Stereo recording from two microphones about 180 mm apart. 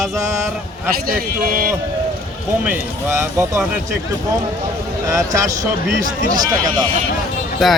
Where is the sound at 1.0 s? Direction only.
55° right (ahead or behind).